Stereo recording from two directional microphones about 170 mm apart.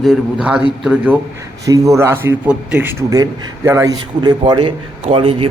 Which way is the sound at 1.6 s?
20° right (ahead or behind).